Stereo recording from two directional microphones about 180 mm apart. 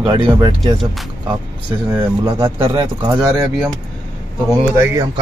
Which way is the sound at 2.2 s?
30° right (ahead or behind).